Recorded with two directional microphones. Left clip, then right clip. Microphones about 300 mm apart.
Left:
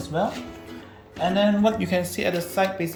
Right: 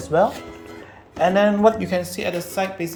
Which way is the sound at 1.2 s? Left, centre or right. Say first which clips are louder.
Right 5 dB; right.